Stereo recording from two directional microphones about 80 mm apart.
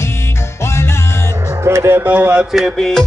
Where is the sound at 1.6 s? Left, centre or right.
Right.